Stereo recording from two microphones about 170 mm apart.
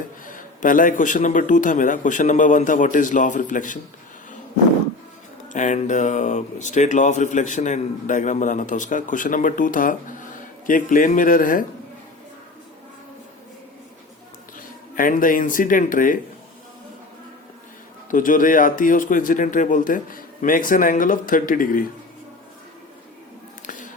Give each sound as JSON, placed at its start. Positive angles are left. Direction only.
{"t": 0.3, "sound": "speech", "side_deg": 50}
{"t": 5.5, "sound": "speech", "side_deg": 45}
{"t": 14.9, "sound": "speech", "side_deg": 55}
{"t": 18.1, "sound": "speech", "side_deg": 50}
{"t": 23.6, "sound": "a sound", "side_deg": 50}